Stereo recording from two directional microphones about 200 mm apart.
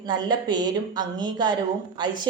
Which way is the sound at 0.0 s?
20° right (ahead or behind).